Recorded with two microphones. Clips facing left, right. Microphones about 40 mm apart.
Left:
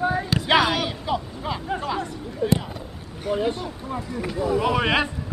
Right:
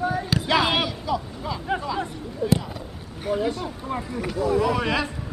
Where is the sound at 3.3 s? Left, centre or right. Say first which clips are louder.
Even; centre.